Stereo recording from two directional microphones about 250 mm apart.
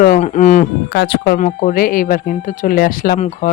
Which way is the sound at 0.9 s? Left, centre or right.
Left.